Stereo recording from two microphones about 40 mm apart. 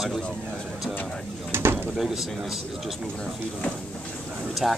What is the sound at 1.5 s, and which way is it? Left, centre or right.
Speech, right.